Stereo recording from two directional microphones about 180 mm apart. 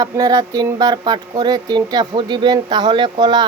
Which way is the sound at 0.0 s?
20° right (ahead or behind).